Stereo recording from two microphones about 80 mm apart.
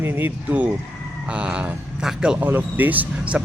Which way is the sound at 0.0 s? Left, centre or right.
Right.